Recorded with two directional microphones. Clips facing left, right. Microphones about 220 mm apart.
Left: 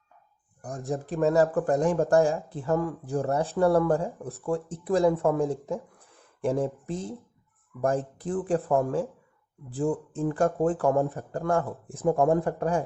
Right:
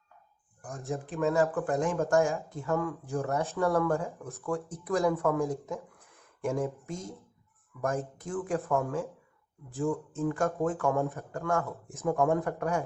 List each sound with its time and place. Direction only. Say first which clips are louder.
0.7 s speech: left 4 dB; 15° left (ahead or behind)
1.0 s speech: left 4 dB; 40° left (ahead or behind)